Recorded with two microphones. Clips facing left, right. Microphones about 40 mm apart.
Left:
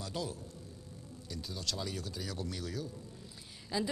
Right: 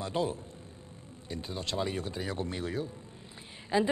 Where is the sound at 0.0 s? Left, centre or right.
Right.